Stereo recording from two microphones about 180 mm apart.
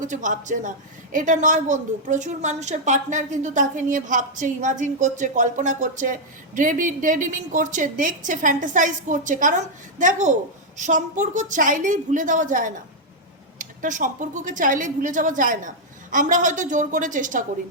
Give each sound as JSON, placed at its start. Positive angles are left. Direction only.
{"t": 0.0, "sound": "a woman's voice", "side_deg": -45}